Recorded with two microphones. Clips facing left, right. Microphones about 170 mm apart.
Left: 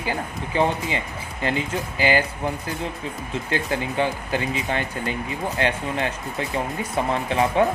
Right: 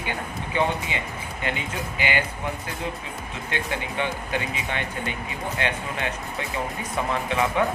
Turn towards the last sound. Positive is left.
turn(degrees=35)  # may be behind; listen again after turning